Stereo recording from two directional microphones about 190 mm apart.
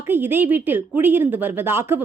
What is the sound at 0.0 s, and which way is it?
A woman's voice, 10° right (ahead or behind).